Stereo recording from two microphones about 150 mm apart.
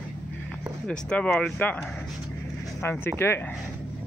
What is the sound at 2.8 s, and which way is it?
Speech, 15° left (ahead or behind).